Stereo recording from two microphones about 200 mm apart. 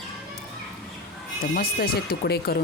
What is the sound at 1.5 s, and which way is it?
Speech, 50° left (ahead or behind).